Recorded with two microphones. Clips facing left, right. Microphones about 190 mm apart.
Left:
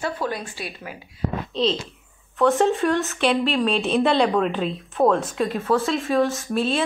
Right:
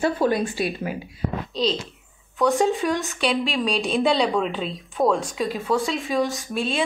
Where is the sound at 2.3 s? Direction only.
Centre (ahead or behind).